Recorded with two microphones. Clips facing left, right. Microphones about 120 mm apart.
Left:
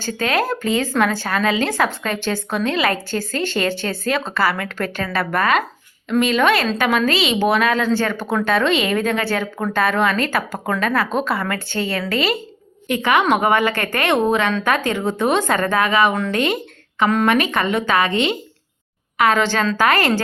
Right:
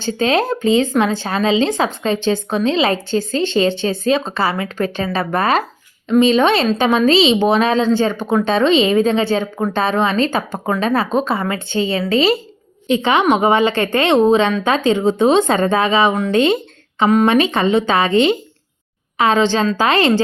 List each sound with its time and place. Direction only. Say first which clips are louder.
0.0 s speech: right 4 dB; 25° right (ahead or behind)